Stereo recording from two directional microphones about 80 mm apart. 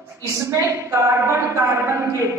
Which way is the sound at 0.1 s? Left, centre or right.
Right.